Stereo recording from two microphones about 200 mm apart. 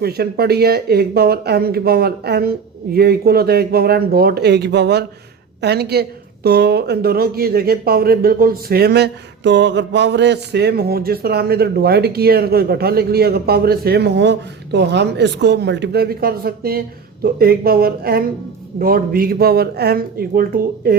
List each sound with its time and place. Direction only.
0.0 s a woman's voice: 50° right (ahead or behind)